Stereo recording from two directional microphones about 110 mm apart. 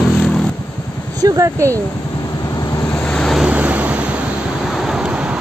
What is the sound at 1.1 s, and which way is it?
Speech, 30° right (ahead or behind).